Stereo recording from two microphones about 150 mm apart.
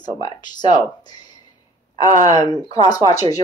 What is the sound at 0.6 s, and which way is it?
Speech, 25° left (ahead or behind).